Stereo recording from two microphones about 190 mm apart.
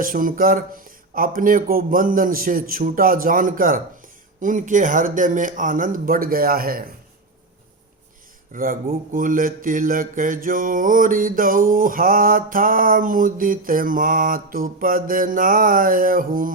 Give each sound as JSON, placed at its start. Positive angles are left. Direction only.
{"t": 0.0, "sound": "speech", "side_deg": -45}
{"t": 8.5, "sound": "speech", "side_deg": -50}